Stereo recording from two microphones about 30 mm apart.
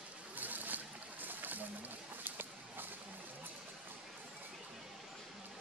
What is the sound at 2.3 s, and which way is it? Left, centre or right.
Walk, right.